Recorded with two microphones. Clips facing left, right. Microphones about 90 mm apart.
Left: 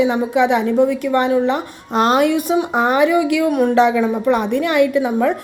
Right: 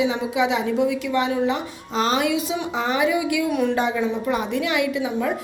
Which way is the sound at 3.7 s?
70° left (ahead or behind).